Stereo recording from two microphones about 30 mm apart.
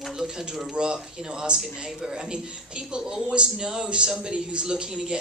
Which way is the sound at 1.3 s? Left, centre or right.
Right.